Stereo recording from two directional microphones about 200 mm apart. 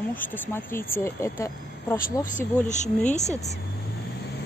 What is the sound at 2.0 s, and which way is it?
Speech, 35° left (ahead or behind).